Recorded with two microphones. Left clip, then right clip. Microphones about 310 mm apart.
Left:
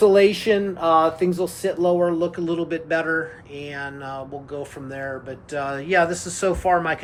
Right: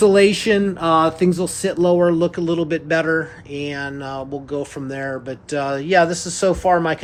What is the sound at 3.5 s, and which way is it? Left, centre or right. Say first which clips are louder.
Mantra: right 7 dB; right.